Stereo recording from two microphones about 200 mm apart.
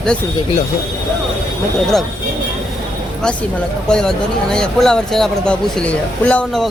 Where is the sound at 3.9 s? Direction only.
5° left (ahead or behind).